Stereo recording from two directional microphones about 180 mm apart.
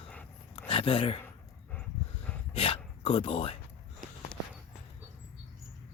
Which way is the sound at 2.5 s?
30° left (ahead or behind).